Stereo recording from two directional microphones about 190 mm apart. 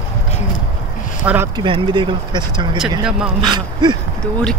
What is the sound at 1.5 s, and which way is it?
Speech, 25° right (ahead or behind).